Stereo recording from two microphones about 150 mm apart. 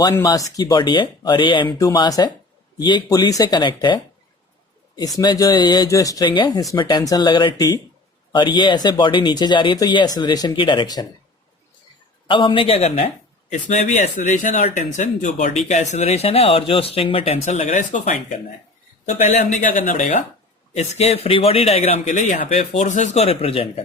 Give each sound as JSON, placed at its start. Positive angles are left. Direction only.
{"t": 0.1, "sound": "speech", "side_deg": 25}
{"t": 12.3, "sound": "speech", "side_deg": 35}
{"t": 13.5, "sound": "speech", "side_deg": 55}
{"t": 20.7, "sound": "speech", "side_deg": 45}